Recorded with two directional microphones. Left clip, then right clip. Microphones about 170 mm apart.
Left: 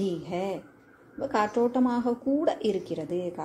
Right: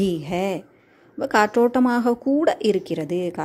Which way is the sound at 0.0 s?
40° right (ahead or behind).